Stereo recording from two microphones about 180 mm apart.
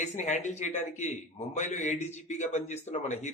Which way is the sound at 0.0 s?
40° left (ahead or behind).